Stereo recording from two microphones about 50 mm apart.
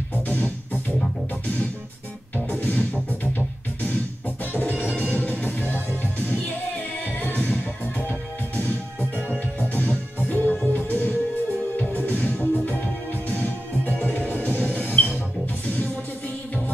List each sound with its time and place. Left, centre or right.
0.3 s music: left
2.3 s music: left
4.6 s music: left
7.2 s music: left